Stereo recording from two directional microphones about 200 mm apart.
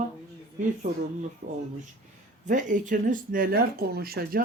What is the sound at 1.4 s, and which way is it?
Speech, 40° right (ahead or behind).